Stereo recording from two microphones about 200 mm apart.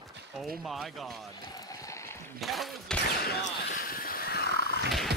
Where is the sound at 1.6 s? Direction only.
15° left (ahead or behind).